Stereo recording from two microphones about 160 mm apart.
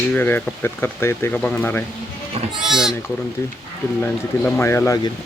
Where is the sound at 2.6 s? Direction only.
Centre (ahead or behind).